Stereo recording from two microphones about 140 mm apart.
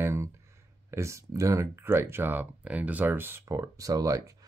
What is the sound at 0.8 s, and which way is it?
Speech, 20° right (ahead or behind).